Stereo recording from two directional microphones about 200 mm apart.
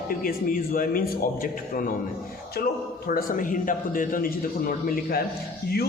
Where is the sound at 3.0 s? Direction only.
45° left (ahead or behind).